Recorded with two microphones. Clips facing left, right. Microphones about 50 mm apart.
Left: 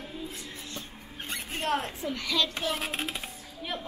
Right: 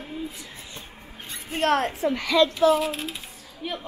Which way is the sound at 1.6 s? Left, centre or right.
Right.